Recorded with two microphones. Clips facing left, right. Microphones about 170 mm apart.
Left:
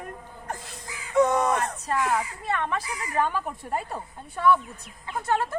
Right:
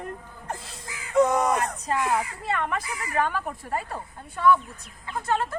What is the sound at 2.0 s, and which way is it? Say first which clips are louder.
A man's voice: even; 15° right (ahead or behind).